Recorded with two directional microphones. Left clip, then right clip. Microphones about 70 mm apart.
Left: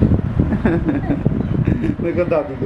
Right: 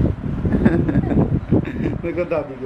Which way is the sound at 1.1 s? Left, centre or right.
Right.